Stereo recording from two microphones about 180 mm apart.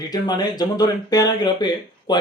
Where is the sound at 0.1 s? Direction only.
20° left (ahead or behind).